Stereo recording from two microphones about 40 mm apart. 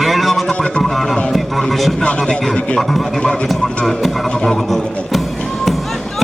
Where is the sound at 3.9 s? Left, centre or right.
Centre.